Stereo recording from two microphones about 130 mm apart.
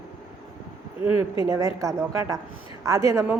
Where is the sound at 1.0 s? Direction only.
45° left (ahead or behind).